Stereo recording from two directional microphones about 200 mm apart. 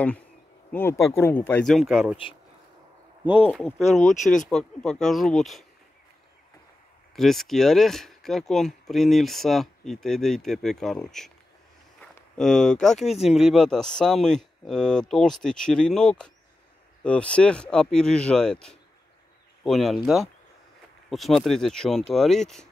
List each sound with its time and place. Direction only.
0.7 s speech: 10° left (ahead or behind)
3.4 s speech: 5° left (ahead or behind)
4.2 s speech: 40° left (ahead or behind)
4.5 s speech: 5° left (ahead or behind)
7.2 s speech: centre (ahead or behind)